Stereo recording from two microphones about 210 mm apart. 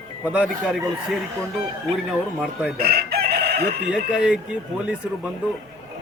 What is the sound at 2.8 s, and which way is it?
Chicken, 50° right (ahead or behind).